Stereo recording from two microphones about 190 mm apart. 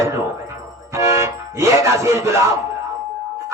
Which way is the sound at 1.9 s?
15° right (ahead or behind).